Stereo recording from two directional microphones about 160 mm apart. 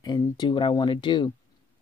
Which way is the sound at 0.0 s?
25° left (ahead or behind).